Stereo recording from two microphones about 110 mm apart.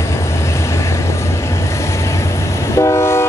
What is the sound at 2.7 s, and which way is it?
Train, 25° left (ahead or behind).